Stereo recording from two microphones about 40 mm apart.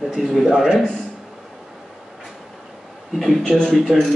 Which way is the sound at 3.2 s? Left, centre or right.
Centre.